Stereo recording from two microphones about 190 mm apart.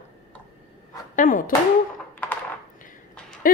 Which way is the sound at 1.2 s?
45° left (ahead or behind).